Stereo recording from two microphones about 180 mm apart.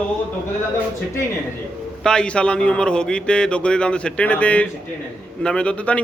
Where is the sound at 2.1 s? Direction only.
5° left (ahead or behind).